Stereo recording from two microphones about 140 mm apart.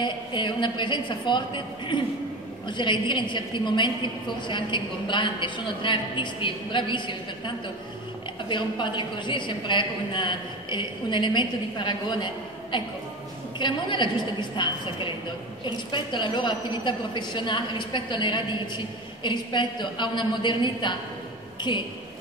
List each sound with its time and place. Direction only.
0.0 s a woman's voice: 35° left (ahead or behind)